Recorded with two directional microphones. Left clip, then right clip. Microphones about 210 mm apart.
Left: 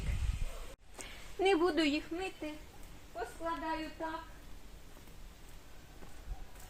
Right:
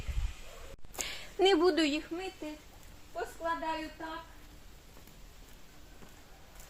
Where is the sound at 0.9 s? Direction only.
55° right (ahead or behind).